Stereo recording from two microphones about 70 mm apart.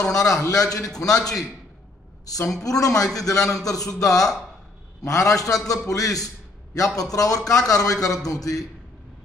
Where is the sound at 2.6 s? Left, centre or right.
Left.